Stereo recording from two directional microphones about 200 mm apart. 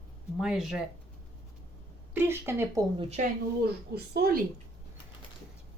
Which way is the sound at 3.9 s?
50° right (ahead or behind).